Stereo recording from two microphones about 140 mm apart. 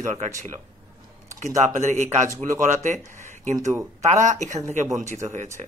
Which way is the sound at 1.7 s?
55° right (ahead or behind).